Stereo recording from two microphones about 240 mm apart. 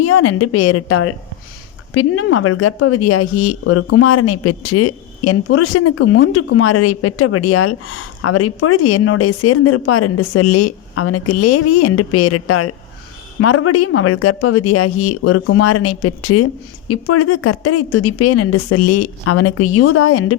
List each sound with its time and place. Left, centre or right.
0.0 s speech: left